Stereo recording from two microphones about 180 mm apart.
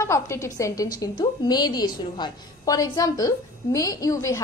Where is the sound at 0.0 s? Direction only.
15° left (ahead or behind).